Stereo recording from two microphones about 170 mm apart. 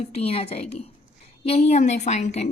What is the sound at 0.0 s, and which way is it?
A woman's voice, 35° left (ahead or behind).